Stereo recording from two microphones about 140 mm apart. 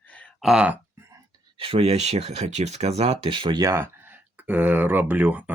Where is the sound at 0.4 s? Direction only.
5° right (ahead or behind).